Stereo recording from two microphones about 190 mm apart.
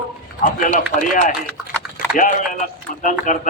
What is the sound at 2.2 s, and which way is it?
A man's voice, 45° left (ahead or behind).